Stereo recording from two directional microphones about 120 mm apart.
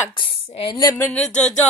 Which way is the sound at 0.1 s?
45° left (ahead or behind).